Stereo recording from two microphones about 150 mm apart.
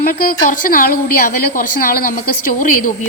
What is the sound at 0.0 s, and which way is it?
A woman's voice, 75° left (ahead or behind).